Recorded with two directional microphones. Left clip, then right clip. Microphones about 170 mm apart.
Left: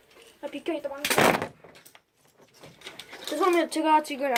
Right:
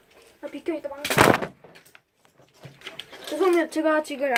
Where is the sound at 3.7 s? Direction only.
20° left (ahead or behind).